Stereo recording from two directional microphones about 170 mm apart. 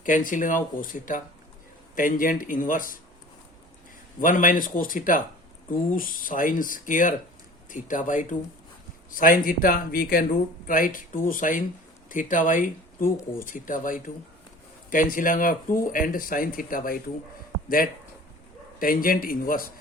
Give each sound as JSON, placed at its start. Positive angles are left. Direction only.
{"t": 0.0, "sound": "speech", "side_deg": 50}
{"t": 4.2, "sound": "speech", "side_deg": 50}
{"t": 18.8, "sound": "speech", "side_deg": 55}